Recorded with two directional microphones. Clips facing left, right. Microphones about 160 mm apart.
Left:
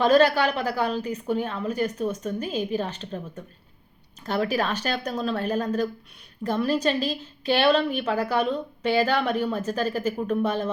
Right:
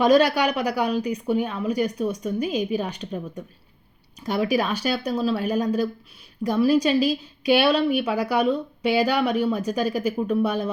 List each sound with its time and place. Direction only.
0.0 s a woman's voice: 15° right (ahead or behind)